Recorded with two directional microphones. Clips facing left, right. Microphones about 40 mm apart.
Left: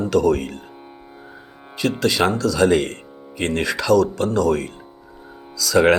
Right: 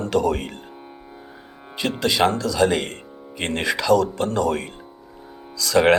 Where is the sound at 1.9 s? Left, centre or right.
Centre.